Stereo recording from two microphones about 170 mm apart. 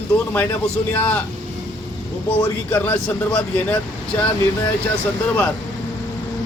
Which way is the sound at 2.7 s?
10° left (ahead or behind).